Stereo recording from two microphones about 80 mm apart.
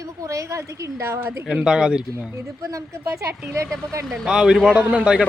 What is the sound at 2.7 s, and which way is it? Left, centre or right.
Speech, right.